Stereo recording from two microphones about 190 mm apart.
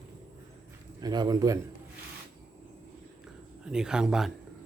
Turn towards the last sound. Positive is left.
turn(degrees=0)  # may be behind; listen again after turning